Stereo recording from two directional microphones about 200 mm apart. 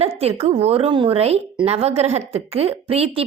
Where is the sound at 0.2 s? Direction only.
30° right (ahead or behind).